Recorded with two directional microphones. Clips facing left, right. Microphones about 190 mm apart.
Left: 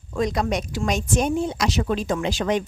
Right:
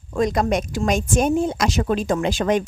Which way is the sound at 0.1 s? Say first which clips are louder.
Right 3 dB; 50° right (ahead or behind).